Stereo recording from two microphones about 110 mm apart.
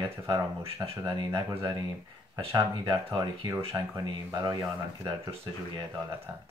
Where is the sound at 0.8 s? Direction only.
50° right (ahead or behind).